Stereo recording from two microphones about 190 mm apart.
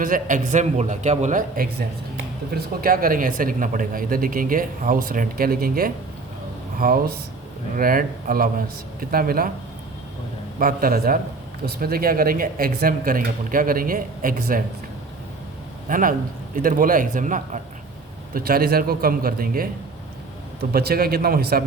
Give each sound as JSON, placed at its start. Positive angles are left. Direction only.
{"t": 0.0, "sound": "a man's voice", "side_deg": -45}
{"t": 2.8, "sound": "speech", "side_deg": -50}
{"t": 10.6, "sound": "speech", "side_deg": -50}
{"t": 15.9, "sound": "speech", "side_deg": -45}
{"t": 20.7, "sound": "speech", "side_deg": -50}